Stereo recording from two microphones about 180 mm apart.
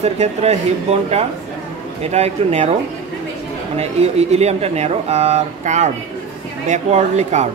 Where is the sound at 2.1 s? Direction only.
35° right (ahead or behind).